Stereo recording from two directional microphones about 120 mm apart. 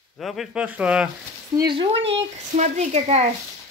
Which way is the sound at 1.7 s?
45° right (ahead or behind).